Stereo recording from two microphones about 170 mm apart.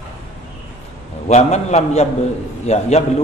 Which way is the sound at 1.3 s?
40° left (ahead or behind).